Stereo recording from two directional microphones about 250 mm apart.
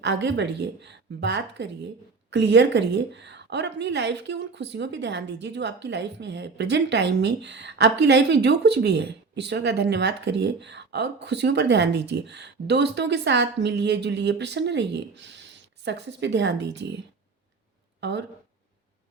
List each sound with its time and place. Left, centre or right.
0.0 s a woman's voice: right
18.0 s speech: right